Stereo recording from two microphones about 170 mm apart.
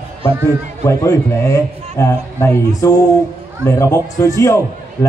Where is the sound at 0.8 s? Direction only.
15° left (ahead or behind).